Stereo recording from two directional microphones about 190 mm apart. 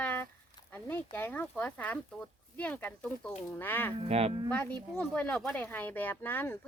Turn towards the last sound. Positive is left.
turn(degrees=10)  # may be behind; listen again after turning